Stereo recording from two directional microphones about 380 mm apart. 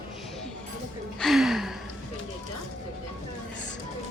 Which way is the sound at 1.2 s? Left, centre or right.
Centre.